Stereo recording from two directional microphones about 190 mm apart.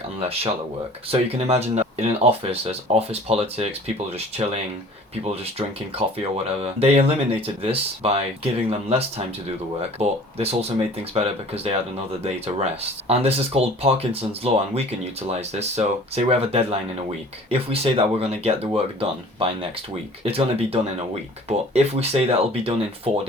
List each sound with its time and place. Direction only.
0.2 s speech: 30° right (ahead or behind)
6.1 s speech: 30° right (ahead or behind)
13.1 s speech: 30° right (ahead or behind)